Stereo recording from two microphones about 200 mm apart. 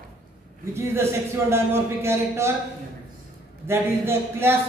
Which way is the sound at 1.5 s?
10° right (ahead or behind).